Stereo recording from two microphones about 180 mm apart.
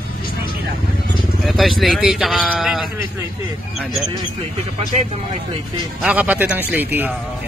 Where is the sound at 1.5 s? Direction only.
Centre (ahead or behind).